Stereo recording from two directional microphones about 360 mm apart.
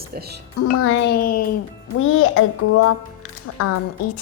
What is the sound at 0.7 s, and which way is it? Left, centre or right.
A woman's voice, left.